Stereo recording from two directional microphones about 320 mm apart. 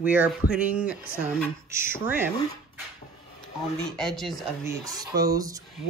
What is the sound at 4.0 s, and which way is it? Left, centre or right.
Speech, centre.